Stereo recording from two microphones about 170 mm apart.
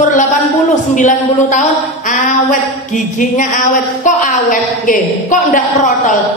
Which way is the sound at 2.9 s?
50° left (ahead or behind).